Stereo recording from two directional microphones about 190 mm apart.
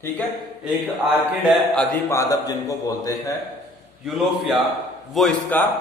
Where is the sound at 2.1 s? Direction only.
20° left (ahead or behind).